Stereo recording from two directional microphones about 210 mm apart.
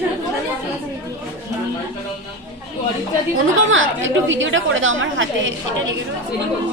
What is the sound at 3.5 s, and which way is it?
A woman's voice, 70° right (ahead or behind).